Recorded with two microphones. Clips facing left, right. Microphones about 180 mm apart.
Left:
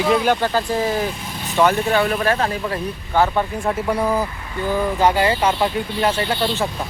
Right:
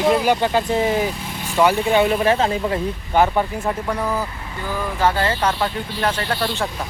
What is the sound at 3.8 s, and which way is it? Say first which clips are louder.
Speech: left 3 dB; 10° left (ahead or behind).